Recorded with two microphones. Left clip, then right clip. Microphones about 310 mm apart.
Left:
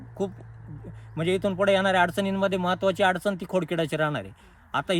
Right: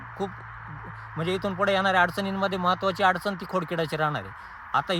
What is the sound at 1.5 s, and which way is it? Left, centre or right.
Speech, centre.